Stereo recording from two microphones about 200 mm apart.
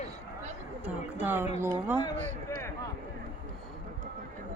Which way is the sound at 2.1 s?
35° right (ahead or behind).